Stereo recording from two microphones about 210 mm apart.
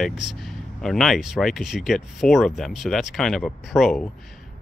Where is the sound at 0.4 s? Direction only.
Centre (ahead or behind).